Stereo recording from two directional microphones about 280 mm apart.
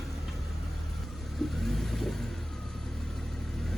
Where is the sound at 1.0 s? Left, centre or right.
Centre.